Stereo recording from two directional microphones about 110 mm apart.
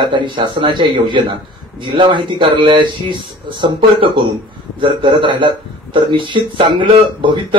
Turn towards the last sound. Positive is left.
turn(degrees=-50)  # may be behind; listen again after turning